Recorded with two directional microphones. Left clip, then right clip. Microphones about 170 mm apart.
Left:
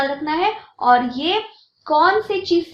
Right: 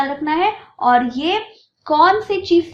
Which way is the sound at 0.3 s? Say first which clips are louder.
Right 2 dB; 30° right (ahead or behind).